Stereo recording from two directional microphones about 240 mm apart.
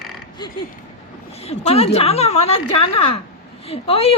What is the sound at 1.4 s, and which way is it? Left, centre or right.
A woman's voice, left.